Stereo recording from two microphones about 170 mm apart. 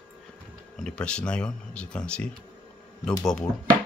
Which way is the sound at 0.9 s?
5° left (ahead or behind).